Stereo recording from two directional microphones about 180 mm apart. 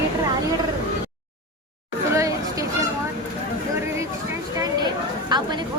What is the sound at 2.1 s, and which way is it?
Chatter, 15° right (ahead or behind).